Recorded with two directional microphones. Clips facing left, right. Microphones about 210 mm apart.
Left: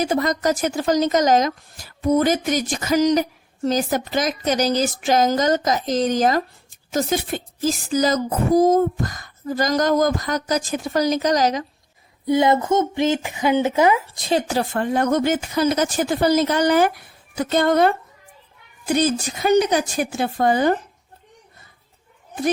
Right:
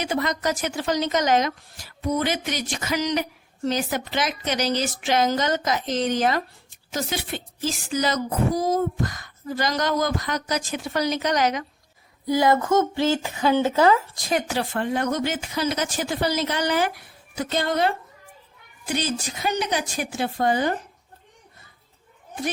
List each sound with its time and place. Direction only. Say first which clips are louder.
0.0 s speech: left 5 dB; 40° left (ahead or behind)
12.2 s speech: left 3 dB; 25° left (ahead or behind)
14.3 s speech: left 4 dB; 35° left (ahead or behind); by 17.9 s 50° left (ahead or behind)
18.9 s speech: left 7 dB; 45° left (ahead or behind)